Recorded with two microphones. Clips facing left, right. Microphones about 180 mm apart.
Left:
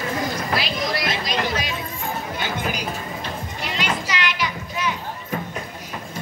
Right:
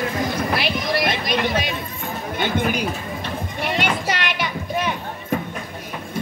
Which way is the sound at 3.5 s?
55° right (ahead or behind).